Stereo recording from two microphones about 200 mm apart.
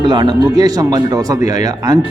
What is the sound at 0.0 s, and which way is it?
Speech, 20° right (ahead or behind).